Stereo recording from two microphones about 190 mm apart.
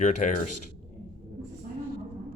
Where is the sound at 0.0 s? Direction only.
40° left (ahead or behind).